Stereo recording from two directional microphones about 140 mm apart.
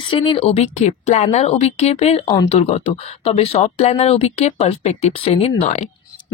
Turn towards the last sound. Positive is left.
turn(degrees=55)  # may be behind; listen again after turning